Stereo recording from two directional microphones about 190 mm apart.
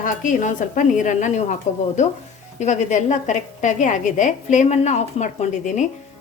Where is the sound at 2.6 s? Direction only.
40° left (ahead or behind).